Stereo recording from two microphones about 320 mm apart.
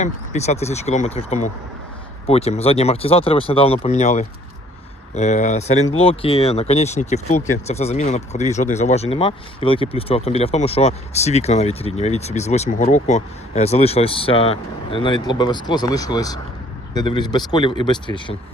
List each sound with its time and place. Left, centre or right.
0.0 s speech: left